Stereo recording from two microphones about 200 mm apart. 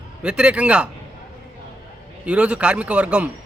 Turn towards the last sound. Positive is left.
turn(degrees=-5)  # may be behind; listen again after turning